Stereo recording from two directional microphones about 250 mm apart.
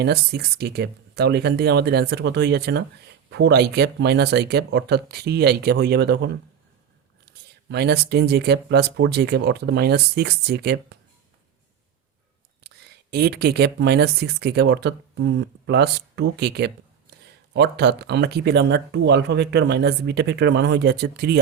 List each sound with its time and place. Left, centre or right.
0.0 s speech: right
7.3 s a sound: right
7.7 s speech: right
12.6 s speech: right